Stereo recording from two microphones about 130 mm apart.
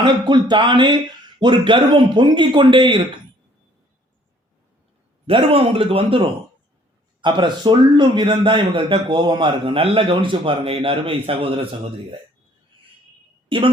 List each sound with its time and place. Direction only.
0.0 s a man's voice: 35° right (ahead or behind)
5.2 s a man's voice: 45° right (ahead or behind)
13.5 s a man's voice: 40° right (ahead or behind)